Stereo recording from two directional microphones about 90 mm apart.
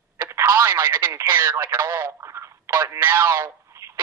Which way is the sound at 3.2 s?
30° right (ahead or behind).